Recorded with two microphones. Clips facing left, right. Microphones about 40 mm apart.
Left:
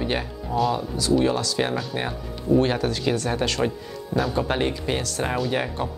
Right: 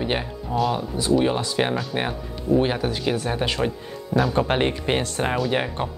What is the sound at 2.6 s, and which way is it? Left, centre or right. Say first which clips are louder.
Speech: even; centre.